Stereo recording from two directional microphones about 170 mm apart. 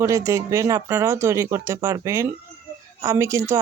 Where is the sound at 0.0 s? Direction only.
15° right (ahead or behind).